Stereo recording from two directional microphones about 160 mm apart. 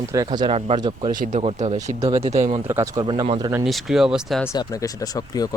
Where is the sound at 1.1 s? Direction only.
55° right (ahead or behind).